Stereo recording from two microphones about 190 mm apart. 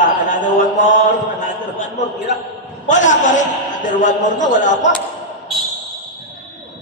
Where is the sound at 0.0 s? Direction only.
45° left (ahead or behind).